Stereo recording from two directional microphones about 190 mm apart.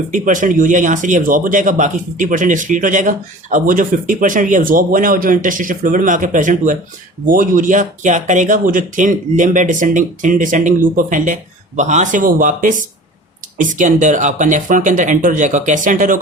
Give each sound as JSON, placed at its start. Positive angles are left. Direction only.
{"t": 0.1, "sound": "speech", "side_deg": -45}